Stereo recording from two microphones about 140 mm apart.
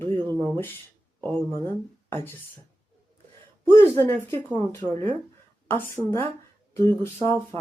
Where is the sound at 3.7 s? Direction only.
15° left (ahead or behind).